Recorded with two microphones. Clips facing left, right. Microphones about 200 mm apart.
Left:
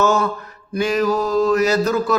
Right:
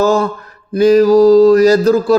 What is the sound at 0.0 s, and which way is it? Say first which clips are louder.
Speech: right 5 dB; 35° right (ahead or behind).